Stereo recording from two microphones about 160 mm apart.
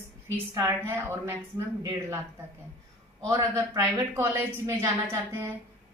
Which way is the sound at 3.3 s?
20° right (ahead or behind).